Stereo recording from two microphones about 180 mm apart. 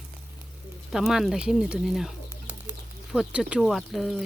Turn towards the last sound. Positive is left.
turn(degrees=0)  # may be behind; listen again after turning